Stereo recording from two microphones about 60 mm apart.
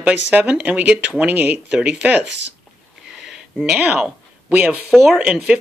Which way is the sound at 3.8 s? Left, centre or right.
Centre.